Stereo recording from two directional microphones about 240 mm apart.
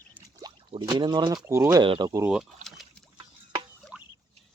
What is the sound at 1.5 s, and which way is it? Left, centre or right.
Speech, centre.